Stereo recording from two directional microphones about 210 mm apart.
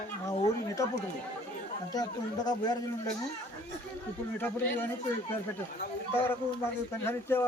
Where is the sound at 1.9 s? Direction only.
20° left (ahead or behind).